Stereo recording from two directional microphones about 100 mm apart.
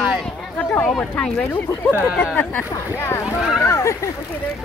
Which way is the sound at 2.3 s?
20° left (ahead or behind).